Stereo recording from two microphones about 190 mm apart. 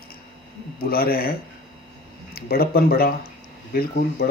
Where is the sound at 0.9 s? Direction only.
50° left (ahead or behind).